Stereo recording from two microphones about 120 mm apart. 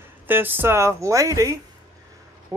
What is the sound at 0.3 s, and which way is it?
Speech, 15° right (ahead or behind).